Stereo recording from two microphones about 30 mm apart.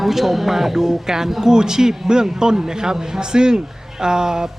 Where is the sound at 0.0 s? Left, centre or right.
Centre.